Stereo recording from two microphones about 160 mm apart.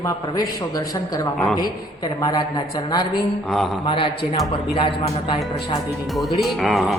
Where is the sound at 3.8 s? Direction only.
30° left (ahead or behind).